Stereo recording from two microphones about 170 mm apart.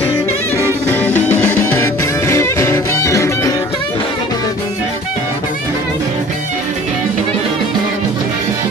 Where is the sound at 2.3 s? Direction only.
15° left (ahead or behind).